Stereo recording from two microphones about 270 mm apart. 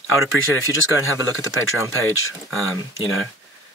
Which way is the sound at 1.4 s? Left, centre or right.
Left.